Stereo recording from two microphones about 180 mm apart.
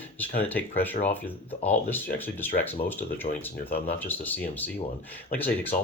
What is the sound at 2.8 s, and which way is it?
Speech, 50° left (ahead or behind).